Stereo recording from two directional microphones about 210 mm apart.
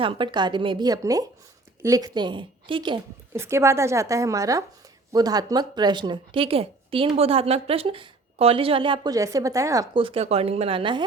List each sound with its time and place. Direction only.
0.0 s a woman's voice: 25° right (ahead or behind)
3.3 s a woman's voice: 10° right (ahead or behind)